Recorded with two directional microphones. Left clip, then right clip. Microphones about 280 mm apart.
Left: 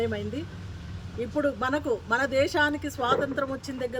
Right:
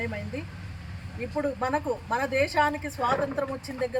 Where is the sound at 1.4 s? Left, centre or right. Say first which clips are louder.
Left 1 dB; centre.